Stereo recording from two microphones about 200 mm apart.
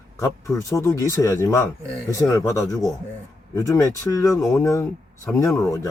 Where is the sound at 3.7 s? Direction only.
15° left (ahead or behind).